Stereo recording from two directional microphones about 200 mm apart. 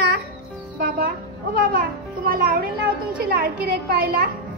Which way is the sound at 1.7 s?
45° right (ahead or behind).